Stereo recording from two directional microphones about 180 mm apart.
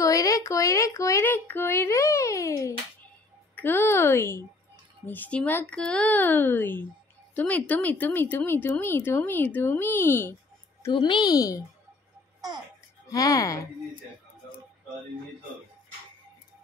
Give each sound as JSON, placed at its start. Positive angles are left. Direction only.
{"t": 0.0, "sound": "speech", "side_deg": 20}
{"t": 10.8, "sound": "a woman's voice", "side_deg": 25}
{"t": 13.1, "sound": "a woman's voice", "side_deg": 20}